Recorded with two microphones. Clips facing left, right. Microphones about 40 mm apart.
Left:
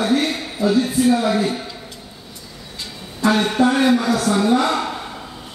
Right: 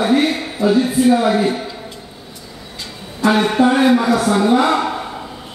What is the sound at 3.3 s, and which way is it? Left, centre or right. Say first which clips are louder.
A man's voice: right 3 dB; centre.